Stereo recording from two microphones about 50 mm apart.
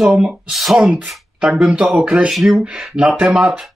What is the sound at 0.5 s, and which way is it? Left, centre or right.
Speech, centre.